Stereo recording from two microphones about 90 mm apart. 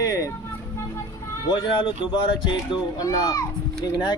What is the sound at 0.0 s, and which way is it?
Vehicle, 40° left (ahead or behind).